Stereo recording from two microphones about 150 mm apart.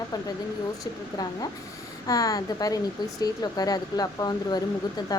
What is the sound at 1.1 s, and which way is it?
Speech, 25° left (ahead or behind).